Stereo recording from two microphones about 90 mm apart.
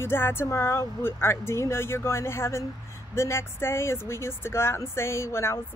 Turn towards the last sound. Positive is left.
turn(degrees=30)  # may be behind; listen again after turning